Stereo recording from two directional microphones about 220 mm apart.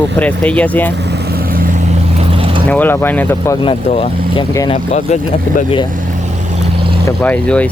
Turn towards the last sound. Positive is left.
turn(degrees=5)  # may be behind; listen again after turning